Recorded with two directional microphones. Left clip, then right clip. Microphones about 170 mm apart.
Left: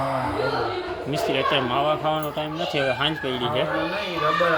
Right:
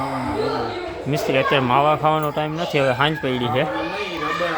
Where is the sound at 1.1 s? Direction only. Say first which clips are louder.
Right 4 dB; 45° right (ahead or behind).